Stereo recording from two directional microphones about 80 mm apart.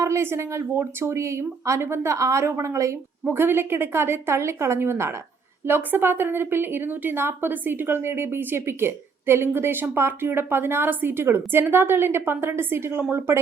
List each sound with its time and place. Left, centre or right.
0.0 s speech: right
3.2 s a woman's voice: right